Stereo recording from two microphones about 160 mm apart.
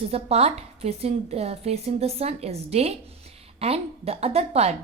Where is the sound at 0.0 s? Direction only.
40° right (ahead or behind).